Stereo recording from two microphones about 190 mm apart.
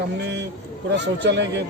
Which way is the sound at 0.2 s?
65° right (ahead or behind).